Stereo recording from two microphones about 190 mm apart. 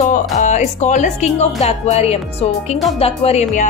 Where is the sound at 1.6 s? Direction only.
35° left (ahead or behind).